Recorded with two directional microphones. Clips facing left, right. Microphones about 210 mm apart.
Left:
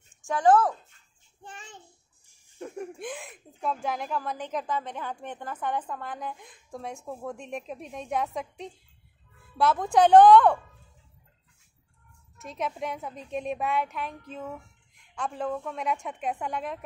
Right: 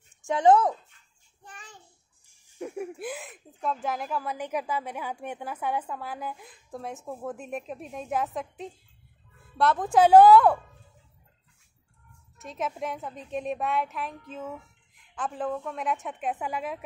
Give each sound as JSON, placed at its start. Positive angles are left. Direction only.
{"t": 0.2, "sound": "speech", "side_deg": -20}
{"t": 1.4, "sound": "a child's voice", "side_deg": 25}
{"t": 2.5, "sound": "a woman's voice", "side_deg": -10}
{"t": 12.4, "sound": "a woman's voice", "side_deg": 0}